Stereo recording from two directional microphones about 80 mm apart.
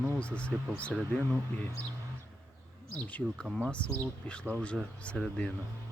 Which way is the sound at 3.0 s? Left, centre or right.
Centre.